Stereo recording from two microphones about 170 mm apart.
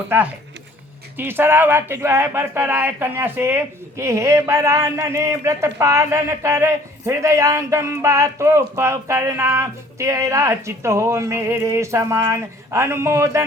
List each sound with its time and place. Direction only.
0.1 s speech: 10° right (ahead or behind)